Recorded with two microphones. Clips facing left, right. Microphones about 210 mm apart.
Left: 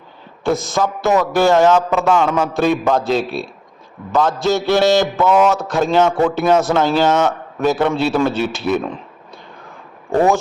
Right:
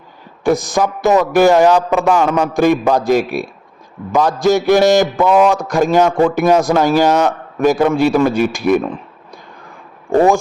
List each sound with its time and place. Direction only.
0.4 s a man's voice: 15° right (ahead or behind)